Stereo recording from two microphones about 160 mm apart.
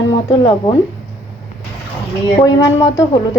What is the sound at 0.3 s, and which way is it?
Speech, 20° left (ahead or behind).